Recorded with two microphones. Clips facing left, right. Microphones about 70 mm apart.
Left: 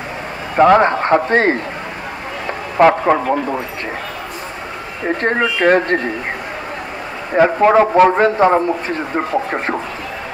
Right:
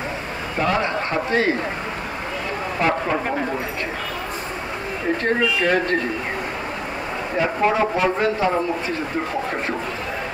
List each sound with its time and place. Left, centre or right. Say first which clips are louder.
0.6 s a man's voice: left 11 dB; left
2.8 s speech: left 10 dB; left
5.2 s a man's voice: left 6 dB; left
7.3 s a man's voice: left 9 dB; left